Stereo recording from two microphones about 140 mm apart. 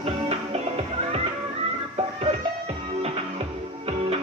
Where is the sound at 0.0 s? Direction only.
50° right (ahead or behind).